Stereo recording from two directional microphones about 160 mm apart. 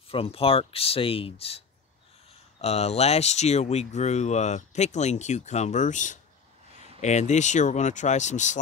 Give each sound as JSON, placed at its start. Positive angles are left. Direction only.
{"t": 0.1, "sound": "speech", "side_deg": 35}
{"t": 2.6, "sound": "speech", "side_deg": 40}